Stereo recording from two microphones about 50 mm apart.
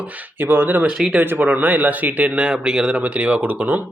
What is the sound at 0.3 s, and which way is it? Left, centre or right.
Speech, right.